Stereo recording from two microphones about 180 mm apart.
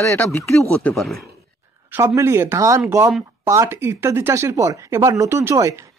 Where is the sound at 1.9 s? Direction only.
15° right (ahead or behind).